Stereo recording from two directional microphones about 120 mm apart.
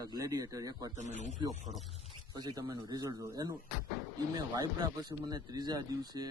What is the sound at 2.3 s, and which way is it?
A man's voice, 35° right (ahead or behind).